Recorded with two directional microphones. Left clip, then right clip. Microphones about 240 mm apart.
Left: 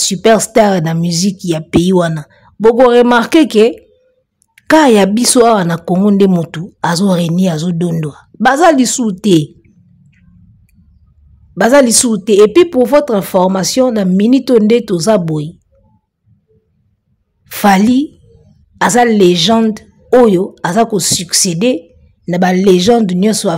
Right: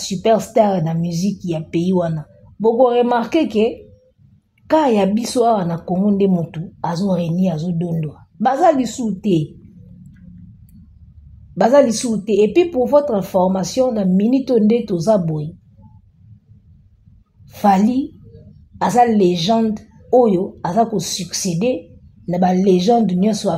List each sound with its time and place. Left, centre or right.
0.0 s a woman's voice: left
11.5 s a woman's voice: left
17.5 s a woman's voice: left